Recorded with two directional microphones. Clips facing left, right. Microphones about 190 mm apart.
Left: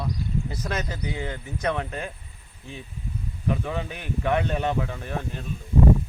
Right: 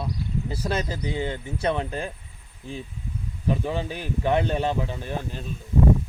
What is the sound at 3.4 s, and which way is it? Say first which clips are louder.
Speech: right 2 dB; 30° right (ahead or behind).